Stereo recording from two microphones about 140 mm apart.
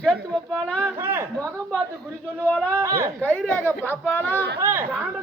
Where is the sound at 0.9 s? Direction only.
15° right (ahead or behind).